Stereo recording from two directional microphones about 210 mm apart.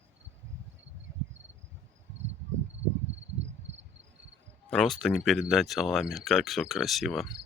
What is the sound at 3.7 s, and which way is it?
Cricket, 60° right (ahead or behind).